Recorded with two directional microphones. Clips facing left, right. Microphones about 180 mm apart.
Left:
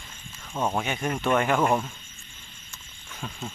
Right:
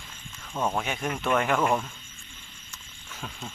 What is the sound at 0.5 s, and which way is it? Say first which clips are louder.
Speech: left 1 dB; 15° left (ahead or behind).